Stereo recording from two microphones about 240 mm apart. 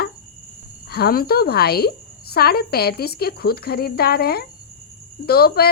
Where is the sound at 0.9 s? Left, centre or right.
Left.